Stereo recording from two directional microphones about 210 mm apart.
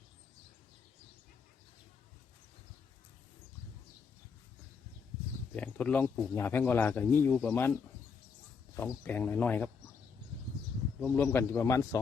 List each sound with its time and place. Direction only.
5.5 s speech: 5° left (ahead or behind)
8.7 s speech: 10° left (ahead or behind)
11.0 s speech: 10° left (ahead or behind)